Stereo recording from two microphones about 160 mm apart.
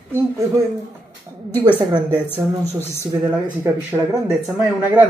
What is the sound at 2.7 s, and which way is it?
Speech, 15° left (ahead or behind).